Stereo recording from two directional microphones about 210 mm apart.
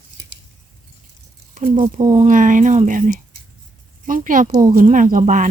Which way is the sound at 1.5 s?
40° right (ahead or behind).